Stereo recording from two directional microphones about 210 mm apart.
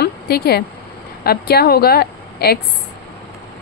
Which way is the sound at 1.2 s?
50° left (ahead or behind).